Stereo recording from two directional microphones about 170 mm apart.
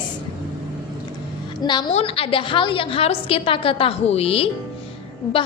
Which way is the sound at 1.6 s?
25° left (ahead or behind).